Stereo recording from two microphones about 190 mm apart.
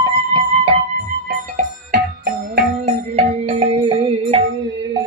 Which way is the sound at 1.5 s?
50° right (ahead or behind).